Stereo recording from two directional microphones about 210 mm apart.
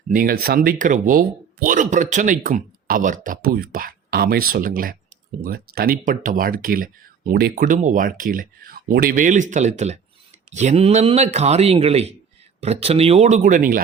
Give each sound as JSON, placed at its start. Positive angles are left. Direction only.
{"t": 0.1, "sound": "speech", "side_deg": -45}